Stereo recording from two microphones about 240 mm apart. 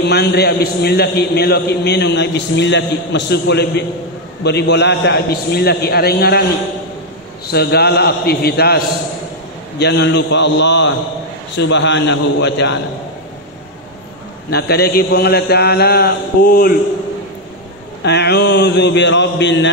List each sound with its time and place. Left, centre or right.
0.0 s a man's voice: left
7.5 s a man's voice: left
14.5 s a man's voice: left
18.0 s a man's voice: left